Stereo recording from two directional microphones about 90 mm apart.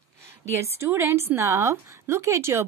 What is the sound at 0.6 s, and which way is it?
Speech, 30° right (ahead or behind).